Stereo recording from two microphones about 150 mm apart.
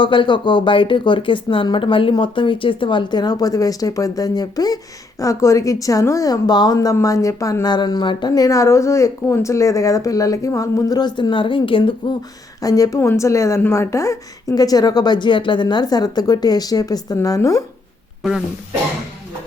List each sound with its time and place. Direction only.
0.0 s a woman's voice: 35° left (ahead or behind)
12.6 s a woman's voice: 25° left (ahead or behind)
18.2 s speech: 5° right (ahead or behind)